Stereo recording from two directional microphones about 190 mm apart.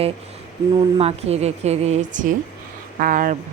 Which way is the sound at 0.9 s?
35° right (ahead or behind).